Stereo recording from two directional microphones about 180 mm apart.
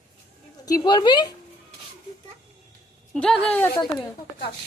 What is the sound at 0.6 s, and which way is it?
Speech, 20° left (ahead or behind).